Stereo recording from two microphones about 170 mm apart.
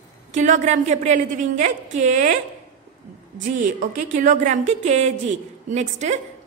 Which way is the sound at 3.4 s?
50° right (ahead or behind).